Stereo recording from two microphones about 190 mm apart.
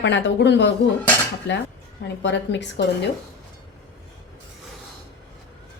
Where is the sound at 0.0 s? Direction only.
70° left (ahead or behind).